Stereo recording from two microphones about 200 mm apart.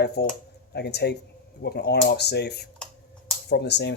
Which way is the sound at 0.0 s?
55° left (ahead or behind).